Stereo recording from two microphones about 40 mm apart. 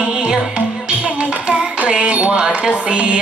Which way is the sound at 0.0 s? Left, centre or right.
Right.